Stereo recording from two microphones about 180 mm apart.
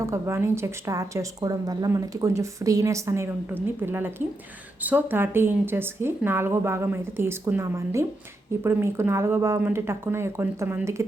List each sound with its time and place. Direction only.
0.0 s speech: 15° right (ahead or behind)